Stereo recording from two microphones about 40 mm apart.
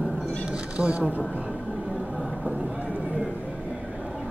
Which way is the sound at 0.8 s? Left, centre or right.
Right.